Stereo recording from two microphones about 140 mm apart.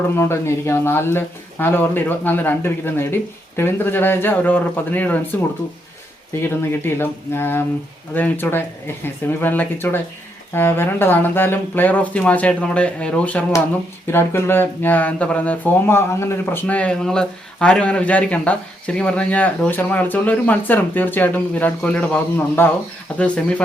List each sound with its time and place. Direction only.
0.2 s speech: 20° left (ahead or behind)